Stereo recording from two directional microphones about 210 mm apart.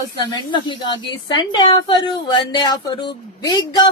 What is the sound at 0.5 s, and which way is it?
Speech, 20° left (ahead or behind).